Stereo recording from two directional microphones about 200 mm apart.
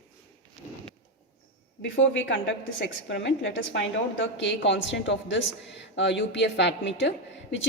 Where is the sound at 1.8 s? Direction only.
65° left (ahead or behind).